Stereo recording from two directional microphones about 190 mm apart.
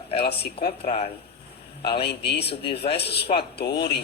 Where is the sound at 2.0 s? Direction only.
60° left (ahead or behind).